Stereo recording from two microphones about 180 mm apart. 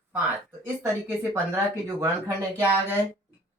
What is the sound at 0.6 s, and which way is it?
Speech, 15° right (ahead or behind).